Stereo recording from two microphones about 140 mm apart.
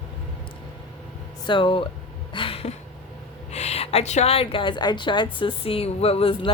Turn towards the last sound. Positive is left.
turn(degrees=45)  # may be behind; listen again after turning